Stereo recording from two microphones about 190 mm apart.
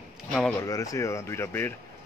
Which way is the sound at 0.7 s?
15° left (ahead or behind).